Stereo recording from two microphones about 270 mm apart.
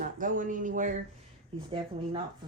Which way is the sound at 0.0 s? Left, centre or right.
Right.